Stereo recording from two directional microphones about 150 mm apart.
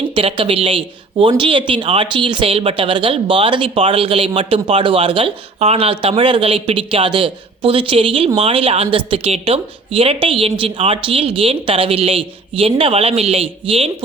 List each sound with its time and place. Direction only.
0.1 s speech: 35° right (ahead or behind)